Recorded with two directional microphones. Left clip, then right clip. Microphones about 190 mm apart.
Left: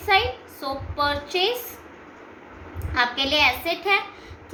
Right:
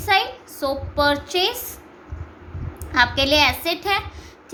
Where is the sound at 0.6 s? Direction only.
65° right (ahead or behind).